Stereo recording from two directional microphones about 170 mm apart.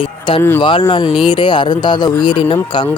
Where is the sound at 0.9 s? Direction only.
30° left (ahead or behind).